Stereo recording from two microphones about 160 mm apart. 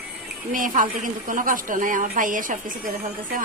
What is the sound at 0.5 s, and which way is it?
A woman's voice, 55° right (ahead or behind).